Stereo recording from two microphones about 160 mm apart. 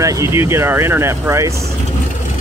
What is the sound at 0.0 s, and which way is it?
Speech, 15° right (ahead or behind).